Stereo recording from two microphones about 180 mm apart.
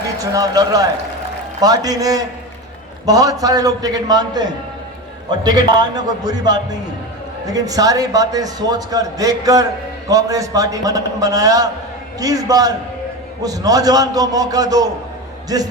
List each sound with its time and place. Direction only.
0.3 s a man's voice: 20° right (ahead or behind)